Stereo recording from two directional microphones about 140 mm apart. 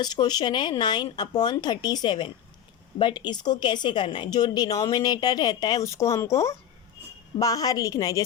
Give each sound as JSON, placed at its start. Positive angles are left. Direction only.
{"t": 0.0, "sound": "a woman's voice", "side_deg": 30}